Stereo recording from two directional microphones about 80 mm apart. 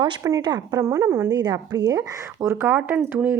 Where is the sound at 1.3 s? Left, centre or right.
Right.